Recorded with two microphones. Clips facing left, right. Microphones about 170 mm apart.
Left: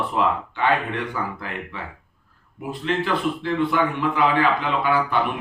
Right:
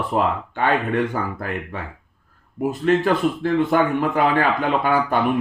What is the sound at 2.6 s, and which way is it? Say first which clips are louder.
A man's voice: right 7 dB; 45° right (ahead or behind).